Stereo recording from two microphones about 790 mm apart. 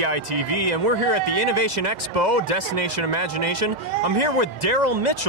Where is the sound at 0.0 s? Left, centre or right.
Right.